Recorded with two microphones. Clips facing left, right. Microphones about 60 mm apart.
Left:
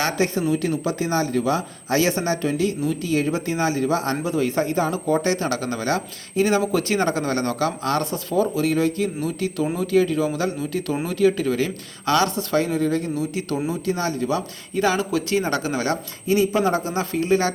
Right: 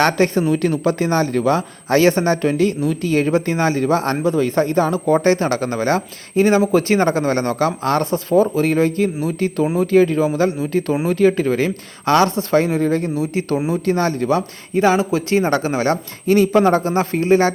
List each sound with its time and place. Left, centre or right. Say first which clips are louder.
0.0 s a man's voice: right 6 dB; right
13.8 s speech: right 6 dB; right
16.2 s a man's voice: right 6 dB; right